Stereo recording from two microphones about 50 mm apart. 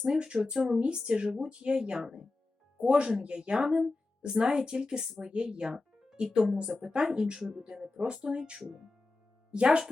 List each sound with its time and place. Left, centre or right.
0.0 s a woman's voice: centre
7.3 s a woman's voice: centre